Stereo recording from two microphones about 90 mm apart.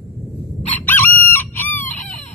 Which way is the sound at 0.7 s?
20° left (ahead or behind).